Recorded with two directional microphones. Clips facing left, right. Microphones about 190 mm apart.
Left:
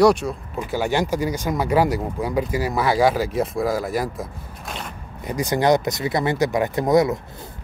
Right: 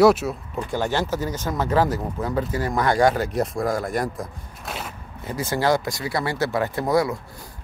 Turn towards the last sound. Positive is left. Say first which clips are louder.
# left 4 dB
turn(degrees=20)  # may be behind; listen again after turning